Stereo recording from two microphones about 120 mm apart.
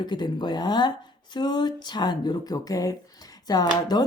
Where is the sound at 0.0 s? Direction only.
40° left (ahead or behind).